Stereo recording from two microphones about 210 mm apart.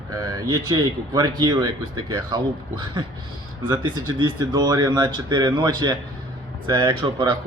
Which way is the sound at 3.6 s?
25° right (ahead or behind).